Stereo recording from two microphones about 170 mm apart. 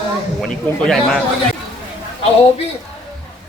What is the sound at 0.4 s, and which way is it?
Speech, centre (ahead or behind).